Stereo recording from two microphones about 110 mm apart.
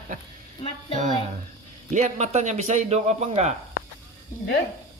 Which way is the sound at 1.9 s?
90° right.